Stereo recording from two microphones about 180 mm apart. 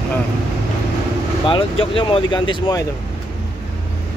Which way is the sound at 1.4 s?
30° left (ahead or behind).